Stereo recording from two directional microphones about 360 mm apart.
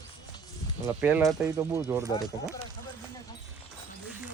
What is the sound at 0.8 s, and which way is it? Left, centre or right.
Speech, centre.